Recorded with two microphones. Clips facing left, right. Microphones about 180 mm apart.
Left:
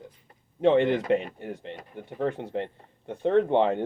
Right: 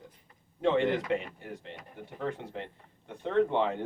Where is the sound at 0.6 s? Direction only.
30° left (ahead or behind).